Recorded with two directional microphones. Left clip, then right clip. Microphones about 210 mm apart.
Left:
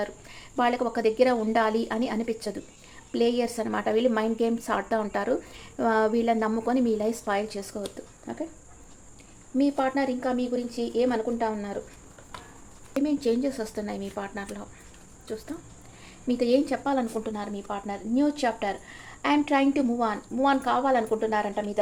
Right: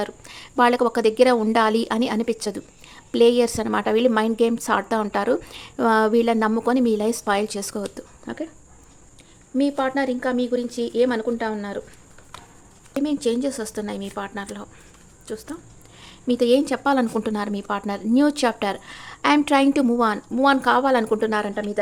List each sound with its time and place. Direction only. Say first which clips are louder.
0.0 s a woman's voice: right 4 dB; 30° right (ahead or behind)
9.6 s speech: right 3 dB; 25° right (ahead or behind)
13.0 s a woman's voice: right 3 dB; 25° right (ahead or behind)